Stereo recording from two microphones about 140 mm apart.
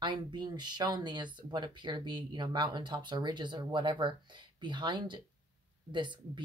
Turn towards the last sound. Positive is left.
turn(degrees=-35)  # may be behind; listen again after turning